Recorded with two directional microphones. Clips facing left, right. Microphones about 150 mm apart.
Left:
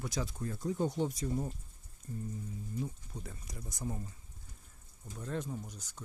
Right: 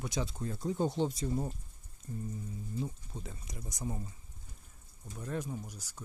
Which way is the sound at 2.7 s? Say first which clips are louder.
Right 1 dB; 25° right (ahead or behind).